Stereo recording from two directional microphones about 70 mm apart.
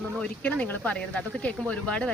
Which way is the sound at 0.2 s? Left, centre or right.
Centre.